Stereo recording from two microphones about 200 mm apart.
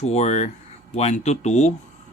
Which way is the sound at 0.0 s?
35° left (ahead or behind).